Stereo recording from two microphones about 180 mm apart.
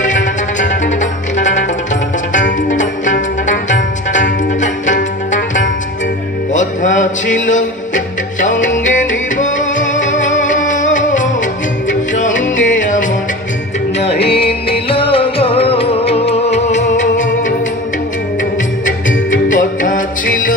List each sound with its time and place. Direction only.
0.0 s music: 45° left (ahead or behind)
14.2 s music: 30° left (ahead or behind)
18.9 s music: 45° left (ahead or behind)